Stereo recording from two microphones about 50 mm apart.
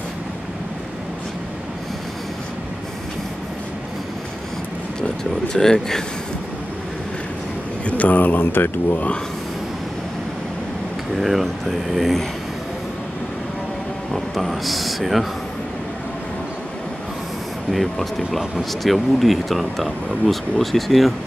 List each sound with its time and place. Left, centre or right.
5.5 s speech: centre
7.8 s speech: left
11.1 s speech: centre
14.1 s speech: centre
17.6 s speech: centre